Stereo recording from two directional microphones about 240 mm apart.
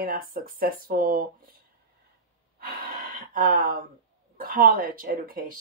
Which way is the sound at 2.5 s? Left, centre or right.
Right.